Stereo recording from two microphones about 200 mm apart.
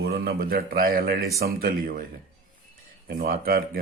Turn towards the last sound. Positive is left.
turn(degrees=-45)  # may be behind; listen again after turning